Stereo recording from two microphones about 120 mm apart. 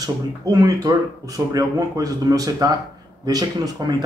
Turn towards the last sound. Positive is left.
turn(degrees=-35)  # may be behind; listen again after turning